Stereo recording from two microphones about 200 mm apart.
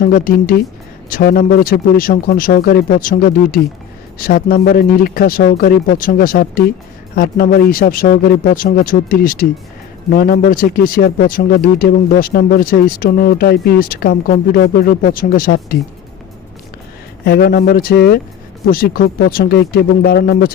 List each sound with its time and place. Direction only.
0.0 s speech: 45° left (ahead or behind)
17.2 s speech: 55° left (ahead or behind)